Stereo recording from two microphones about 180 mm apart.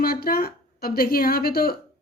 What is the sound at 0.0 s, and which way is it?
Speech, 55° left (ahead or behind).